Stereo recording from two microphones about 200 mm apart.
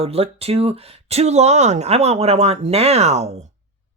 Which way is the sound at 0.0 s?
30° right (ahead or behind).